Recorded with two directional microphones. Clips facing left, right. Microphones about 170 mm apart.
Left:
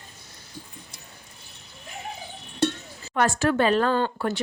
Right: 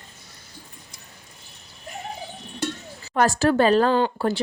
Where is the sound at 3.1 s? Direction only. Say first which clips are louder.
Right 3 dB; 35° right (ahead or behind).